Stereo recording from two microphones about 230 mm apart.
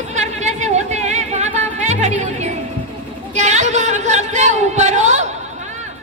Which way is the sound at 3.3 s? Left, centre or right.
Right.